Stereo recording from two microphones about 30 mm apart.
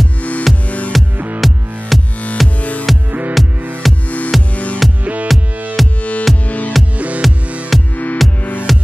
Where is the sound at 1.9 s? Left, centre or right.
Centre.